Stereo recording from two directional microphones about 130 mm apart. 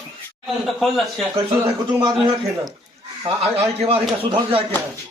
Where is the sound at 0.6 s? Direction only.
Centre (ahead or behind).